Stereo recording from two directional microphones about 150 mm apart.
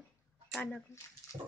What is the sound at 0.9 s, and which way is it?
Speech, 20° left (ahead or behind).